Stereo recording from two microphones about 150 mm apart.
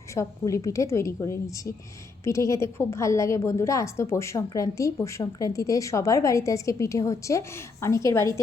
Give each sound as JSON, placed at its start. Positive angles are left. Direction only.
{"t": 0.1, "sound": "a woman's voice", "side_deg": 20}